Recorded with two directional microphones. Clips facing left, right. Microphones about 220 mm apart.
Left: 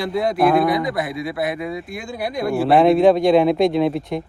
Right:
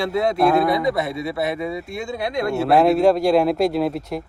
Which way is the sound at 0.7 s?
25° right (ahead or behind).